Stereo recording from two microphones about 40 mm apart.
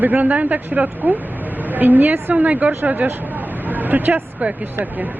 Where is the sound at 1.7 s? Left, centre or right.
Right.